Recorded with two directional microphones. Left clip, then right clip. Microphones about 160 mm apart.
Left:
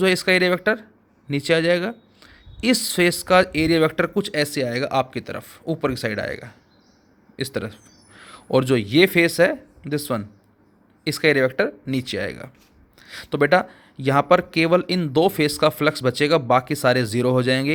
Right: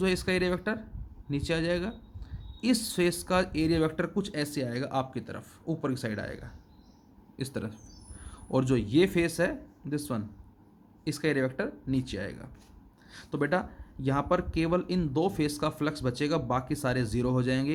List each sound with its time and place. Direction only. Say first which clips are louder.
0.0 s speech: left 11 dB; 35° left (ahead or behind)